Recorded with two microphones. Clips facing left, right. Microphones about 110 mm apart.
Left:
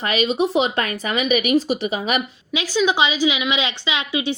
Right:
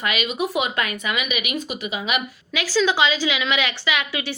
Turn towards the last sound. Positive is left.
turn(degrees=20)  # may be behind; listen again after turning